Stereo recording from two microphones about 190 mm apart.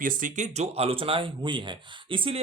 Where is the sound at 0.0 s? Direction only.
45° right (ahead or behind).